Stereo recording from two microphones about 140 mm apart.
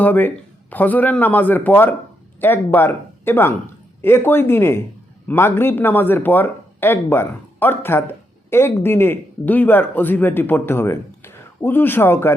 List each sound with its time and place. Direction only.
0.0 s speech: 15° left (ahead or behind)